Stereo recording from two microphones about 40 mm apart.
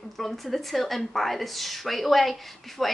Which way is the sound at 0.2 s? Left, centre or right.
Centre.